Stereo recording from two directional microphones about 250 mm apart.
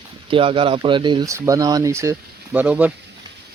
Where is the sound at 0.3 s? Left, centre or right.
Right.